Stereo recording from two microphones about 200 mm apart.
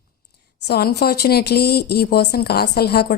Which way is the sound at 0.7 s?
55° left (ahead or behind).